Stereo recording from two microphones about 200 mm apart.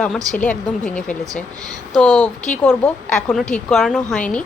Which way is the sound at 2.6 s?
10° left (ahead or behind).